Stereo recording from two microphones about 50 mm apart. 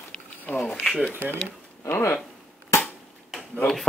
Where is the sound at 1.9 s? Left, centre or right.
Left.